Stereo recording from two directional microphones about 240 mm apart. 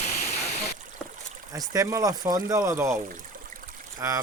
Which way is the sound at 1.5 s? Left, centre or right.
Centre.